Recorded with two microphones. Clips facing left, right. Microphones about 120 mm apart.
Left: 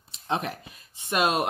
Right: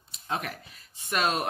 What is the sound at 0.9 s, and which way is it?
Speech, 20° left (ahead or behind).